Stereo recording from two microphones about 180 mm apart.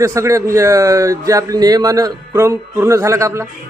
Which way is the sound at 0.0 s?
15° right (ahead or behind).